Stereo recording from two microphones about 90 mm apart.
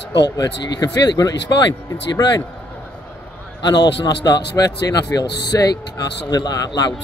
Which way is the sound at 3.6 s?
55° left (ahead or behind).